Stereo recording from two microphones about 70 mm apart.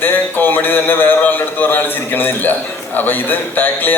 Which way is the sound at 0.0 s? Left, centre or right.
Left.